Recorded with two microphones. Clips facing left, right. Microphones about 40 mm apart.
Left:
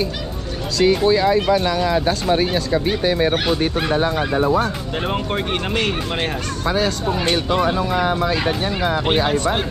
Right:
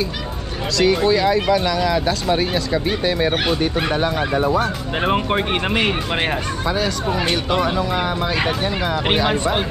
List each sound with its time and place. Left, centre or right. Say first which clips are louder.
0.7 s speech: left 1 dB; right
5.0 s speech: right 4 dB; centre